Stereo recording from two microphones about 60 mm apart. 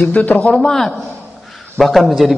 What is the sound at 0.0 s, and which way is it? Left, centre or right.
Speech, left.